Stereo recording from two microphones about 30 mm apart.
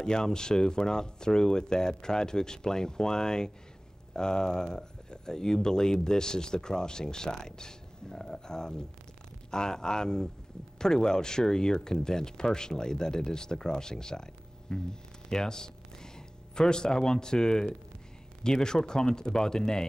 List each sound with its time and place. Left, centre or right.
0.0 s speech: left